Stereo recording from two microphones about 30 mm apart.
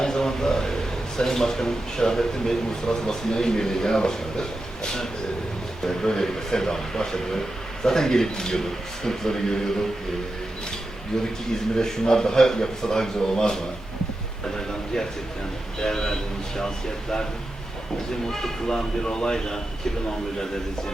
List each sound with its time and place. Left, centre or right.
0.0 s a man's voice: centre
11.8 s a man's voice: centre
15.8 s a man's voice: left
18.7 s a man's voice: left